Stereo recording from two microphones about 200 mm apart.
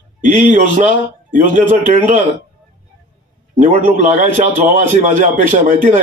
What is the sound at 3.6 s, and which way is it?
A man's voice, 40° right (ahead or behind).